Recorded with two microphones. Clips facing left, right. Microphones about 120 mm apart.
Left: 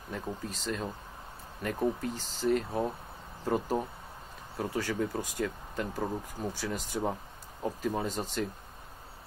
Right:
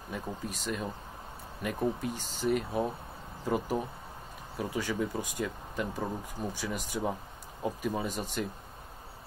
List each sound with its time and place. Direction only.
0.1 s speech: 15° right (ahead or behind)